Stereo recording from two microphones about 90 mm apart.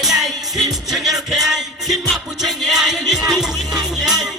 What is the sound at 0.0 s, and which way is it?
Music, centre (ahead or behind).